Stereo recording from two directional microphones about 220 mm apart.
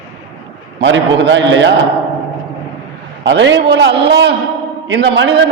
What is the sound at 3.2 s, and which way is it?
A man's voice, 55° right (ahead or behind).